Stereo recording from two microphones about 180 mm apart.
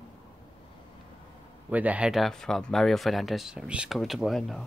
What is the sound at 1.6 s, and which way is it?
Speech, 10° right (ahead or behind).